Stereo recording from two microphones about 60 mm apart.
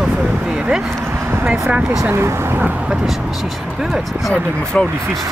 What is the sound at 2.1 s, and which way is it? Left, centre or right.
Speech, right.